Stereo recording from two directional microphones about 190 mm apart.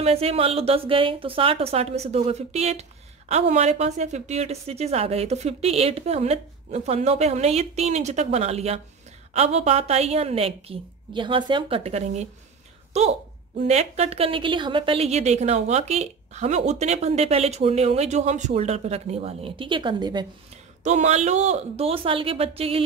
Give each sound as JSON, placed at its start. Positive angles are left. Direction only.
{"t": 0.0, "sound": "a woman's voice", "side_deg": -30}
{"t": 20.8, "sound": "a woman's voice", "side_deg": -40}